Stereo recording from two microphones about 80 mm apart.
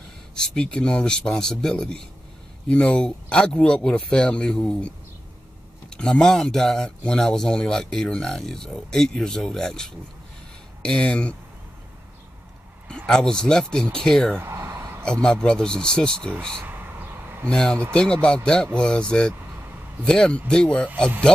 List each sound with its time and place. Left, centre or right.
0.3 s speech: centre
12.8 s speech: centre
14.4 s a sound: right
15.2 s speech: centre
17.5 s speech: centre